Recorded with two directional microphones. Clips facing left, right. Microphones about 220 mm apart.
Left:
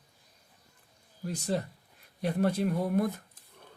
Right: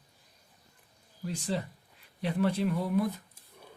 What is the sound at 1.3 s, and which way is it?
Speech, 45° left (ahead or behind).